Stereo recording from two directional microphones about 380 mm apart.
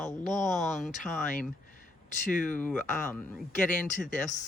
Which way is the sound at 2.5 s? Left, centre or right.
Centre.